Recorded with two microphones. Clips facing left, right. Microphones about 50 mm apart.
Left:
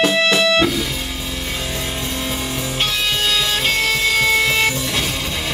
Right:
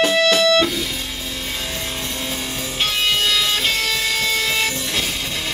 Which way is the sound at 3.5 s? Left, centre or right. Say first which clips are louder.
Left 2 dB; centre.